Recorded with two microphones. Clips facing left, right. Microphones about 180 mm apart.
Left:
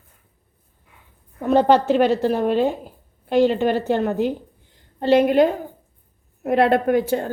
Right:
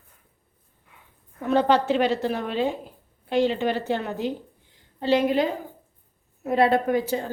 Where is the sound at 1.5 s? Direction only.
45° left (ahead or behind).